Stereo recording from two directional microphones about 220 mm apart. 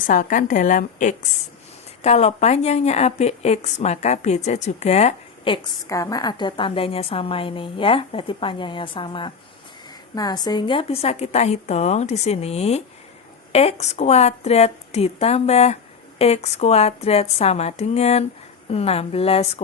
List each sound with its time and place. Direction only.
0.1 s a woman's voice: 35° left (ahead or behind)